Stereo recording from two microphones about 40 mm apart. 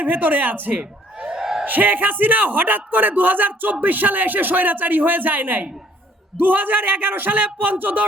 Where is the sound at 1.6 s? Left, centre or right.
Right.